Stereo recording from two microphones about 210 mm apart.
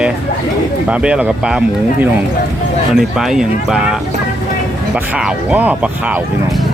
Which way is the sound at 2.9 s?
Centre (ahead or behind).